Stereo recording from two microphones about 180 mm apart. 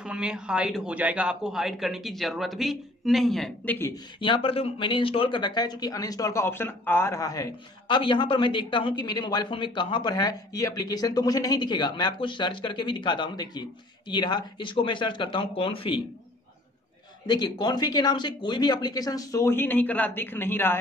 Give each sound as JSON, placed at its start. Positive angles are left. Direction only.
{"t": 0.0, "sound": "a man's voice", "side_deg": -5}
{"t": 4.2, "sound": "speech", "side_deg": 30}
{"t": 17.3, "sound": "speech", "side_deg": 25}